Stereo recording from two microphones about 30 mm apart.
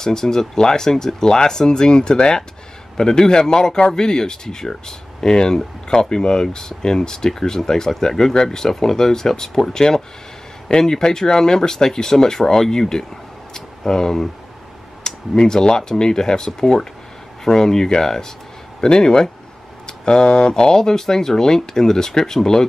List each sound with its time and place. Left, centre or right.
0.0 s speech: centre
13.5 s a sound: centre
15.0 s speech: left